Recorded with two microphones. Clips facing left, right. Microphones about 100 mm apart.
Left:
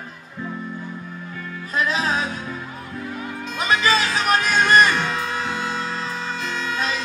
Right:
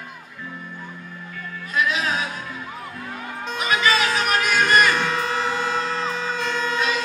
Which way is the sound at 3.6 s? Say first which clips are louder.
Left 1 dB; 35° left (ahead or behind).